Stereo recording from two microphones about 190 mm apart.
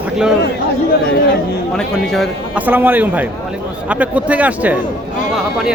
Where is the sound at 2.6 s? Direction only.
10° right (ahead or behind).